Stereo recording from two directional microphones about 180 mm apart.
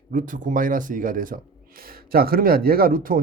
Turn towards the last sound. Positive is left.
turn(degrees=-50)  # may be behind; listen again after turning